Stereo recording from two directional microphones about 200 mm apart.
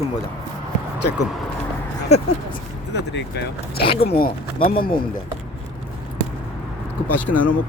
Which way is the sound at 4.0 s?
50° left (ahead or behind).